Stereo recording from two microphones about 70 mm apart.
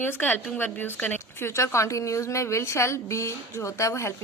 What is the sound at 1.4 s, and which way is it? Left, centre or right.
A woman's voice, left.